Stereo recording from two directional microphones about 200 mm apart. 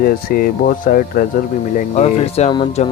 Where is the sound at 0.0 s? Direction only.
45° left (ahead or behind).